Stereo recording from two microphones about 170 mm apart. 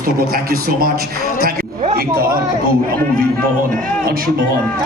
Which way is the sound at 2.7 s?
60° right (ahead or behind).